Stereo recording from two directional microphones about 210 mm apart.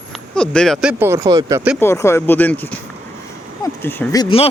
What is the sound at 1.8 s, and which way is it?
Speech, 10° left (ahead or behind).